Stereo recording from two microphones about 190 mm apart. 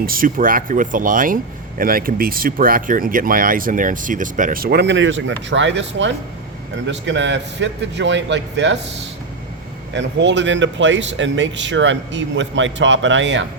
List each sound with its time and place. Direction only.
0.0 s speech: 50° right (ahead or behind); by 8.8 s 70° right (ahead or behind)
9.9 s speech: 70° right (ahead or behind)